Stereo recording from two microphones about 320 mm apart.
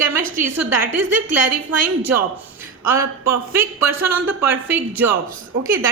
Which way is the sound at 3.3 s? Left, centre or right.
Centre.